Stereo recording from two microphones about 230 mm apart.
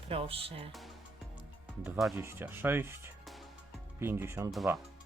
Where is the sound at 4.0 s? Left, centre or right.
Centre.